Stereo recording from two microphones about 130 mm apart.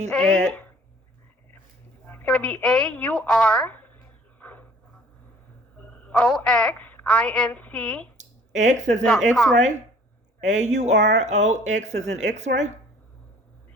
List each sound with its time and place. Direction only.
0.1 s speech: 10° left (ahead or behind)
2.0 s a woman's voice: 10° left (ahead or behind)
4.4 s a sound: 15° left (ahead or behind)
5.8 s a woman's voice: 10° left (ahead or behind)
8.2 s a sound: 70° right (ahead or behind)
9.3 s speech: 5° left (ahead or behind)
10.4 s speech: 65° right (ahead or behind)